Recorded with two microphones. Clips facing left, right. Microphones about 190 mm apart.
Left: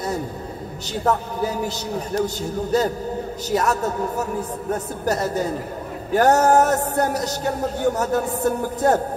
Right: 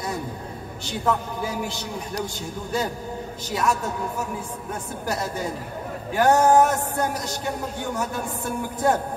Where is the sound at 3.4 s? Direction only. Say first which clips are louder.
Left 3 dB; 40° left (ahead or behind).